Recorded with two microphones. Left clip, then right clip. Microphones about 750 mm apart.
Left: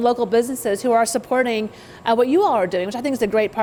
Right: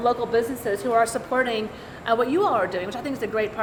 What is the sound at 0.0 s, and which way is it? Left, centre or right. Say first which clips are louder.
A woman's voice: left 4 dB; left.